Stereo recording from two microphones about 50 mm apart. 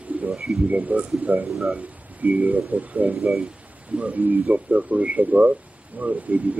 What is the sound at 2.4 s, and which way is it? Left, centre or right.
A man's voice, right.